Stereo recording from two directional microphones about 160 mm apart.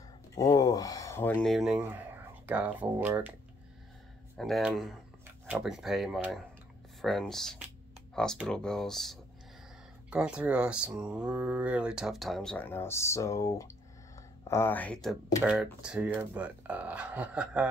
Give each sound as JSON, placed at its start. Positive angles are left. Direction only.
{"t": 0.3, "sound": "a sound", "side_deg": 20}
{"t": 1.4, "sound": "speech", "side_deg": 0}
{"t": 4.4, "sound": "speech", "side_deg": 0}
{"t": 15.4, "sound": "speech", "side_deg": -5}